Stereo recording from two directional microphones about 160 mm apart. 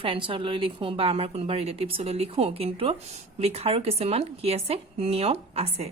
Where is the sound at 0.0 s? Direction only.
35° right (ahead or behind).